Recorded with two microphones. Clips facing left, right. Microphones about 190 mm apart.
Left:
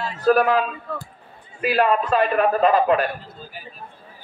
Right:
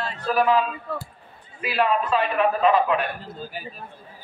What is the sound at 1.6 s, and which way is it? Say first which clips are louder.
A man's voice: left 3 dB; 45° left (ahead or behind).